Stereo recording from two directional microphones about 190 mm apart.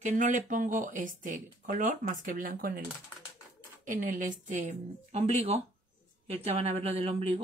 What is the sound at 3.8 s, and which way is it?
Speech, 45° right (ahead or behind).